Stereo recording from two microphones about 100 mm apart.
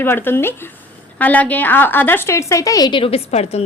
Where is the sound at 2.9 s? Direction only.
70° left (ahead or behind); by 3.6 s 90° left.